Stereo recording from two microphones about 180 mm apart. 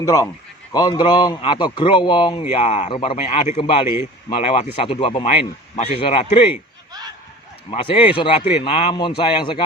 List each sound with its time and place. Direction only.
0.0 s a man's voice: 15° left (ahead or behind)
2.5 s a man's voice: 35° left (ahead or behind)
7.7 s a man's voice: 30° left (ahead or behind)